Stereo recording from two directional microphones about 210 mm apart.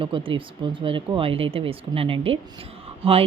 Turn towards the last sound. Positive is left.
turn(degrees=-25)  # may be behind; listen again after turning